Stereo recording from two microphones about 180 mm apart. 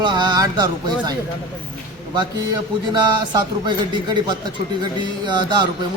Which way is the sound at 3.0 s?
25° right (ahead or behind).